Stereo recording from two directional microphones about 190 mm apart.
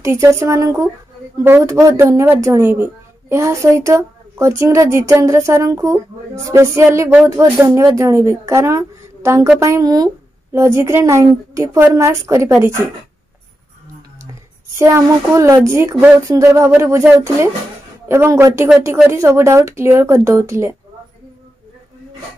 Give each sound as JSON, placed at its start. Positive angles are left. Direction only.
{"t": 0.0, "sound": "a woman's voice", "side_deg": -15}
{"t": 14.8, "sound": "a woman's voice", "side_deg": -15}